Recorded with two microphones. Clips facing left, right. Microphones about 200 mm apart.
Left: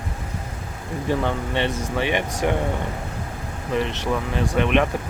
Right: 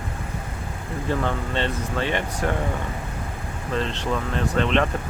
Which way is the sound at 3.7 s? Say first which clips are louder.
Left 2 dB; 15° left (ahead or behind).